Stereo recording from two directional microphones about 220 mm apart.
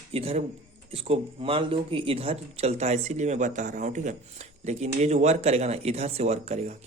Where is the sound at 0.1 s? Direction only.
25° right (ahead or behind).